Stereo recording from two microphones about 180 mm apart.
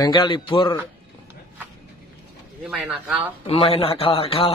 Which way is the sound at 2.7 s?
5° right (ahead or behind).